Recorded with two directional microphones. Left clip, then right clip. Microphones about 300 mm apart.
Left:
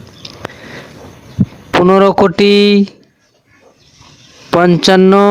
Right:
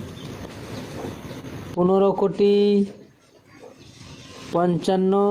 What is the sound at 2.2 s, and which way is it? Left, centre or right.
Speech, left.